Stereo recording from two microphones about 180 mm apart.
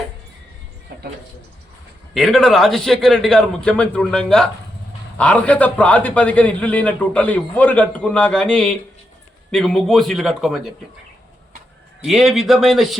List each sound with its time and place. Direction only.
0.9 s a sound: 65° right (ahead or behind)
2.1 s a man's voice: centre (ahead or behind)
12.0 s a man's voice: centre (ahead or behind)